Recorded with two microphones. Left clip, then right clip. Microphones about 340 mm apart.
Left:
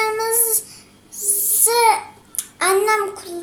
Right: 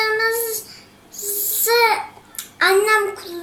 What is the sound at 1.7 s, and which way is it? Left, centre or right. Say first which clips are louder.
A child's voice: even; centre.